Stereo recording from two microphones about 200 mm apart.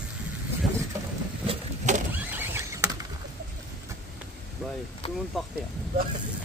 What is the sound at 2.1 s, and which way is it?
Power windows, 10° right (ahead or behind).